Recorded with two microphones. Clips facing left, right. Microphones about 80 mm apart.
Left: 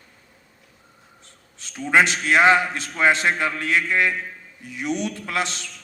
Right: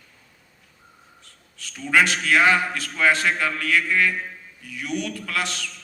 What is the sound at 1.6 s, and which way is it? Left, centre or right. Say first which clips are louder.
A man's voice: left 2 dB; left.